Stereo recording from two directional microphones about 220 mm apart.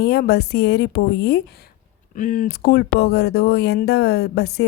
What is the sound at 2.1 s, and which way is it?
Speech, 40° left (ahead or behind).